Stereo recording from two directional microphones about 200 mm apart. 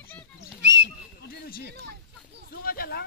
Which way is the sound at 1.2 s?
50° left (ahead or behind).